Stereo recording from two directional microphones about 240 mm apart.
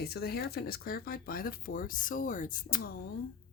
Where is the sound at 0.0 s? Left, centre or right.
Left.